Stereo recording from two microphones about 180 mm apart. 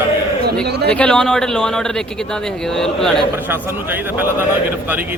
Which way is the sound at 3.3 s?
10° right (ahead or behind).